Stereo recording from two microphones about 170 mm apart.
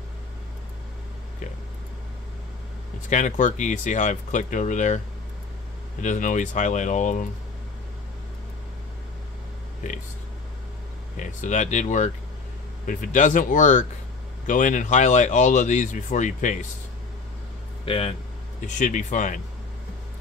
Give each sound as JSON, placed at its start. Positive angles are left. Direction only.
{"t": 3.1, "sound": "speech", "side_deg": 45}
{"t": 9.8, "sound": "speech", "side_deg": 45}
{"t": 11.1, "sound": "speech", "side_deg": 45}
{"t": 17.8, "sound": "speech", "side_deg": 30}
{"t": 18.8, "sound": "speech", "side_deg": 45}